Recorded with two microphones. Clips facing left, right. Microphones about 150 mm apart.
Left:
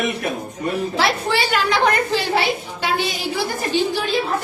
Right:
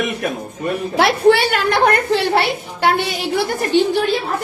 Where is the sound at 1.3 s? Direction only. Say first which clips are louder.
Right 6 dB; 60° right (ahead or behind).